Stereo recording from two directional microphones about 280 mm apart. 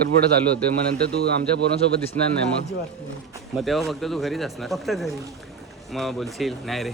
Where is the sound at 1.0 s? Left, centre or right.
Right.